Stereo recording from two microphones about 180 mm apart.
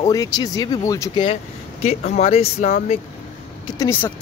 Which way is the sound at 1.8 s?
40° left (ahead or behind).